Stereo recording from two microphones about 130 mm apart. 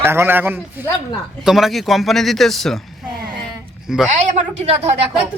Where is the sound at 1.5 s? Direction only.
Centre (ahead or behind).